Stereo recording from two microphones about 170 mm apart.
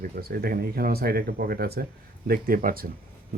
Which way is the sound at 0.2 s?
60° right (ahead or behind).